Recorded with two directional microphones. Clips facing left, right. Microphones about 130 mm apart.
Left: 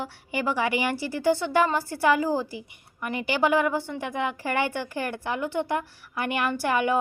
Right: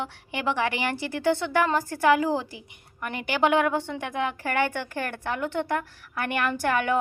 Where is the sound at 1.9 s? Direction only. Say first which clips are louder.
Right 1 dB; 55° right (ahead or behind).